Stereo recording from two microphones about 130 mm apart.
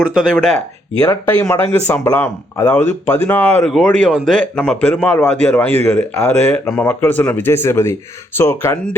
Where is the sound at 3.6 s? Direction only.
5° left (ahead or behind).